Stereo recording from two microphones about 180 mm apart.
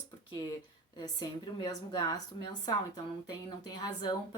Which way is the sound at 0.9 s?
25° left (ahead or behind).